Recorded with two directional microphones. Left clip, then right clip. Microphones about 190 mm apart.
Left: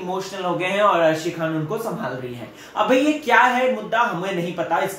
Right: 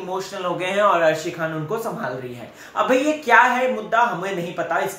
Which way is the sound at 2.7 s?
5° right (ahead or behind).